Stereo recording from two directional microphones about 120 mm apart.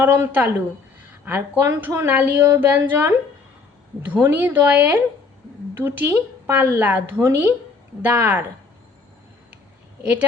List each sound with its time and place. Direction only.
0.0 s a woman's voice: 15° right (ahead or behind)
4.1 s a woman's voice: 15° right (ahead or behind)